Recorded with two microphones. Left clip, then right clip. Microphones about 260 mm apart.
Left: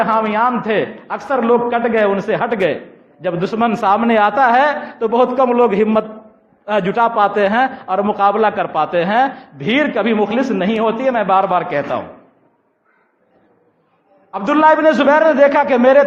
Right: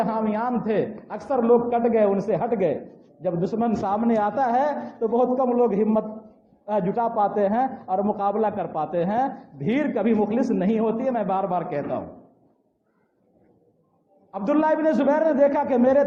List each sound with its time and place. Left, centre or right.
0.0 s a man's voice: left
14.3 s a man's voice: left